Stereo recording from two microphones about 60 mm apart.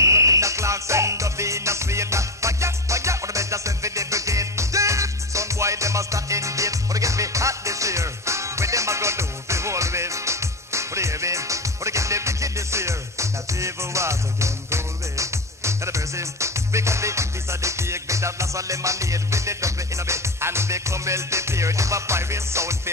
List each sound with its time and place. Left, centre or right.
0.0 s music: right